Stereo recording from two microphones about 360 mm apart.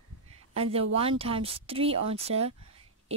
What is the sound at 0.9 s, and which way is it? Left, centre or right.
Speech, centre.